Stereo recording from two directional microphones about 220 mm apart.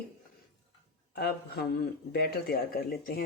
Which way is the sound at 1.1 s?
45° left (ahead or behind).